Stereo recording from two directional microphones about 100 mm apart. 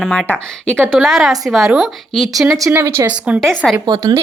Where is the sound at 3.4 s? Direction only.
5° left (ahead or behind).